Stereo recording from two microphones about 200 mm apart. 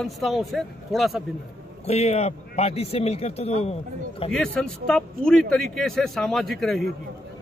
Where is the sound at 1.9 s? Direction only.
30° left (ahead or behind).